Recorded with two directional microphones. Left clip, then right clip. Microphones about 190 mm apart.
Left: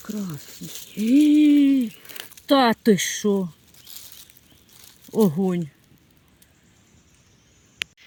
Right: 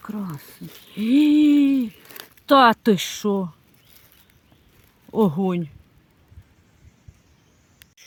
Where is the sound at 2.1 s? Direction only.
35° right (ahead or behind).